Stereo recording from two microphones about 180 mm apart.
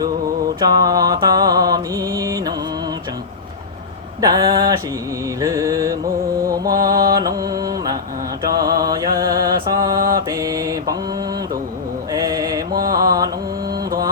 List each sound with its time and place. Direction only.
0.6 s mantra: 20° right (ahead or behind)
4.2 s a sound: 20° right (ahead or behind)
5.4 s music: 20° right (ahead or behind)
7.2 s mantra: 20° right (ahead or behind)
12.1 s mantra: 20° right (ahead or behind)
12.9 s music: 20° right (ahead or behind)